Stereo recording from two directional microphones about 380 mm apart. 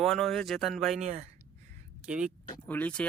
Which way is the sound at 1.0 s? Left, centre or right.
Centre.